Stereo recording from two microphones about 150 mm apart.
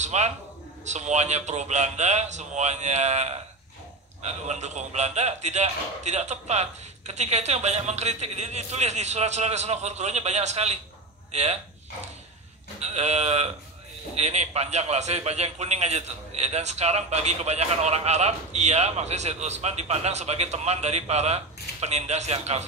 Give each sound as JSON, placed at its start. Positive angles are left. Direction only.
{"t": 0.0, "sound": "a man's voice", "side_deg": -50}
{"t": 12.8, "sound": "a man's voice", "side_deg": -45}